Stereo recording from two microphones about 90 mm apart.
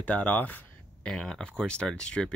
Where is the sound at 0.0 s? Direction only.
15° left (ahead or behind).